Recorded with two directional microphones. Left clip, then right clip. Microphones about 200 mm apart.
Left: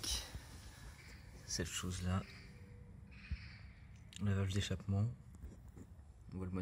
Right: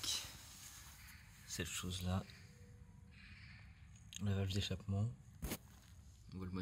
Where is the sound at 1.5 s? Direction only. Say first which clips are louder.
Left 2 dB; 5° right (ahead or behind).